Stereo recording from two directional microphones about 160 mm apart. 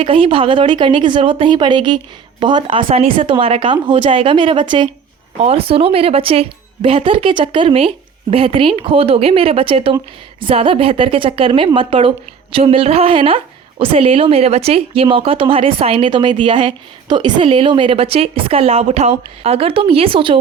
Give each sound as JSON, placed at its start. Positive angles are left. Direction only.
{"t": 0.0, "sound": "a woman's voice", "side_deg": -35}